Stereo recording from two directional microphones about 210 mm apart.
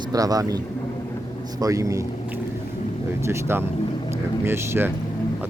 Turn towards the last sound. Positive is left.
turn(degrees=-10)  # may be behind; listen again after turning